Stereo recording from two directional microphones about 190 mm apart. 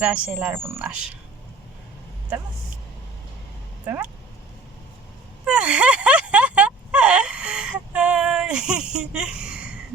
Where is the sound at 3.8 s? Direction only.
10° right (ahead or behind).